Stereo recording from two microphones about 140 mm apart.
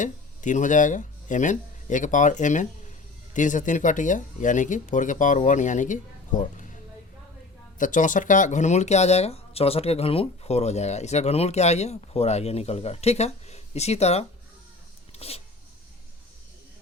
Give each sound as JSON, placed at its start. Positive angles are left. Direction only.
{"t": 0.0, "sound": "speech", "side_deg": 65}
{"t": 7.8, "sound": "speech", "side_deg": 65}
{"t": 15.1, "sound": "a sound", "side_deg": 45}